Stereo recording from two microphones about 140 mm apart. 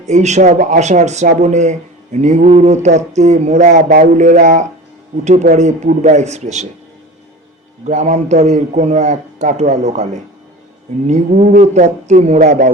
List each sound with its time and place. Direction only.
0.0 s a man's voice: 55° right (ahead or behind)
7.9 s a man's voice: 60° right (ahead or behind)
11.6 s a man's voice: 55° right (ahead or behind)